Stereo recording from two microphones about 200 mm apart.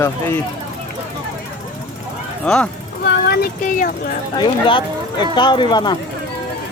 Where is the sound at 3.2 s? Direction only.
50° left (ahead or behind).